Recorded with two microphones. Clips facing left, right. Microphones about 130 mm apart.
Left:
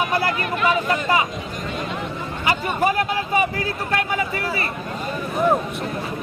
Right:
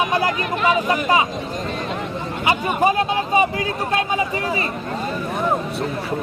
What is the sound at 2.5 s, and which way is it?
Speech, 20° right (ahead or behind).